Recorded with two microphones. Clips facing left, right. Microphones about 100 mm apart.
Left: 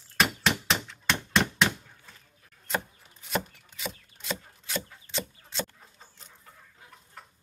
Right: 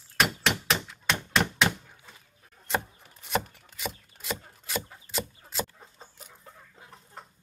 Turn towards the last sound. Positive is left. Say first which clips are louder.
# right 3 dB
turn(degrees=-25)  # may be behind; listen again after turning